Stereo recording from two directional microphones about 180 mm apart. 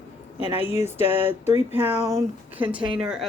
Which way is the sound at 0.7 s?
15° right (ahead or behind).